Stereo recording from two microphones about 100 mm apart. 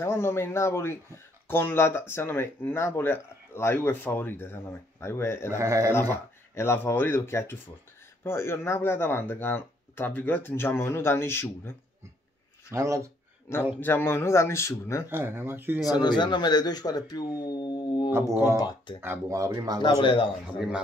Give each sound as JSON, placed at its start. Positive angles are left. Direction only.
{"t": 0.0, "sound": "speech", "side_deg": 25}
{"t": 5.6, "sound": "speech", "side_deg": -30}
{"t": 5.9, "sound": "speech", "side_deg": 25}
{"t": 12.7, "sound": "speech", "side_deg": -30}
{"t": 13.7, "sound": "speech", "side_deg": 20}
{"t": 15.0, "sound": "speech", "side_deg": -20}
{"t": 15.9, "sound": "speech", "side_deg": 45}
{"t": 18.9, "sound": "speech", "side_deg": -25}
{"t": 19.3, "sound": "speech", "side_deg": -35}
{"t": 19.8, "sound": "speech", "side_deg": 60}